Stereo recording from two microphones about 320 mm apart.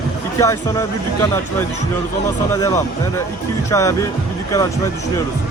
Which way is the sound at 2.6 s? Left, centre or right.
Centre.